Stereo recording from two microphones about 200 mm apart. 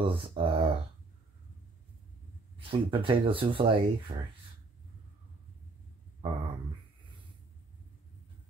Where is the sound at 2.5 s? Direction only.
25° right (ahead or behind).